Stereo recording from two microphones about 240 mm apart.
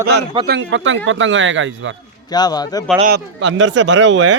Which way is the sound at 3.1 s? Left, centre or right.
Right.